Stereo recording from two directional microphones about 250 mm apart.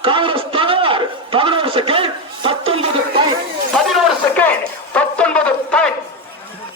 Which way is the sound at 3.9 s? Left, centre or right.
Centre.